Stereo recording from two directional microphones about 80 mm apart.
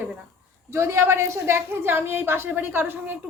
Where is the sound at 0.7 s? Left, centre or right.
Right.